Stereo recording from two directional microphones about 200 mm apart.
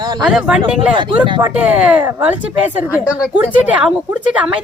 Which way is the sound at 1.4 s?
10° right (ahead or behind).